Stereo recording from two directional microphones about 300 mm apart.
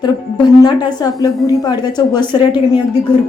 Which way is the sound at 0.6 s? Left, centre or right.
Centre.